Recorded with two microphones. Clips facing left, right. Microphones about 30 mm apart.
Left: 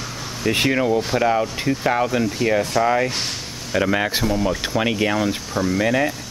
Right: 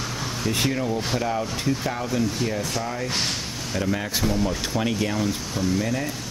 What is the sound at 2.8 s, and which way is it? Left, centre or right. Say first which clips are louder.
Speech: left 8 dB; left.